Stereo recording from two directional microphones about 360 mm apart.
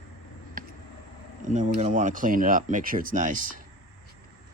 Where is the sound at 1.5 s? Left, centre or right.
Centre.